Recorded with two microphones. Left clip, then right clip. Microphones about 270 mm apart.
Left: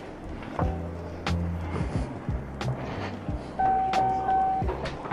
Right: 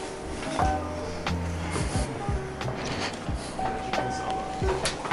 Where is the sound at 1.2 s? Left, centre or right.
Centre.